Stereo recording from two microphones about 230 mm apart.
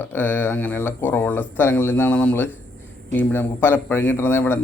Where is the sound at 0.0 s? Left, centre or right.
Centre.